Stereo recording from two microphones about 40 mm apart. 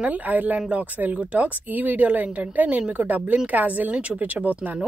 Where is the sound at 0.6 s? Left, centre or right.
Right.